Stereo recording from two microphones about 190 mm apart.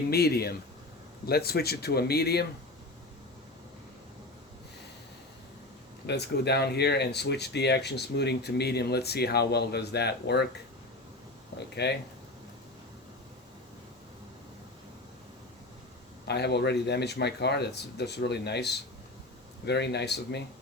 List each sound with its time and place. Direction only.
0.1 s speech: 55° left (ahead or behind)
6.1 s speech: 60° left (ahead or behind)
11.7 s speech: 60° left (ahead or behind)
16.2 s speech: 60° left (ahead or behind)